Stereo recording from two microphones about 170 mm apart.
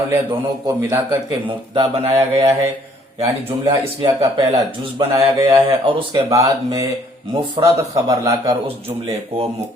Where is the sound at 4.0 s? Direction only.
30° right (ahead or behind).